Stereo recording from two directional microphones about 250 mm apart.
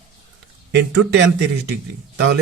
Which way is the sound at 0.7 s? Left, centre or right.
Right.